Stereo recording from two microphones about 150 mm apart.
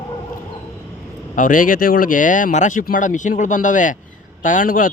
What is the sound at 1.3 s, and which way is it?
A man's voice, 65° left (ahead or behind).